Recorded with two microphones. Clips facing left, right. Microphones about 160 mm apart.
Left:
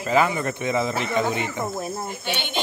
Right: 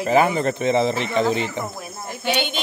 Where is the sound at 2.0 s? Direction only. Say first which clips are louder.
Right 5 dB; 90° right.